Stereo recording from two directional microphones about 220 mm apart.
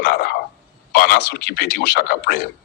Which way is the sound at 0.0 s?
40° left (ahead or behind).